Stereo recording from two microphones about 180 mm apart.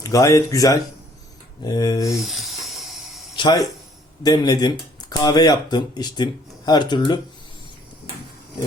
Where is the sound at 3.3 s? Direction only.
25° left (ahead or behind).